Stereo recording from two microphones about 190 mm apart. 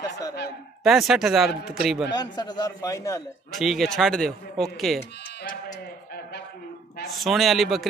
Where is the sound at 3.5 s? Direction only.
Centre (ahead or behind).